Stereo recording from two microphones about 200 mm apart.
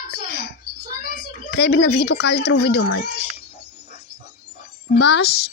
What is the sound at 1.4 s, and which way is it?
Speech, 55° left (ahead or behind).